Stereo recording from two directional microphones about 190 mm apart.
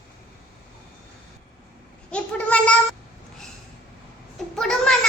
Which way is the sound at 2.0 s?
5° left (ahead or behind).